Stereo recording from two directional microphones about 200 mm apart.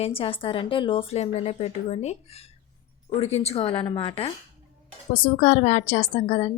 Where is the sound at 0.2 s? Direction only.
25° left (ahead or behind).